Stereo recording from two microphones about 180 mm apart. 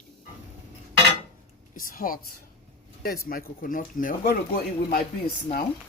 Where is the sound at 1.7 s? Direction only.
50° left (ahead or behind).